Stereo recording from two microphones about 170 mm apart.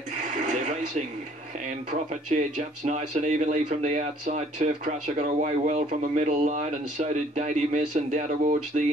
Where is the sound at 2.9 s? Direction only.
45° right (ahead or behind).